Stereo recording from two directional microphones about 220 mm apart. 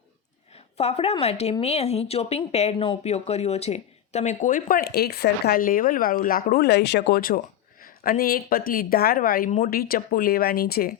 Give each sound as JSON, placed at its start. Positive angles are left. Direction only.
{"t": 0.5, "sound": "a woman's voice", "side_deg": 30}